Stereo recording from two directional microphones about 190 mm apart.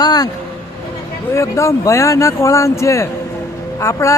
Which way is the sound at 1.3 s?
15° left (ahead or behind).